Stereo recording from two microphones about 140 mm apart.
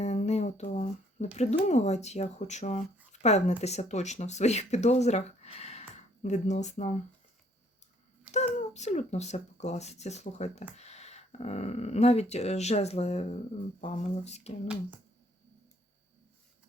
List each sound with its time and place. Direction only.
0.0 s speech: 50° left (ahead or behind)
8.3 s speech: 55° left (ahead or behind)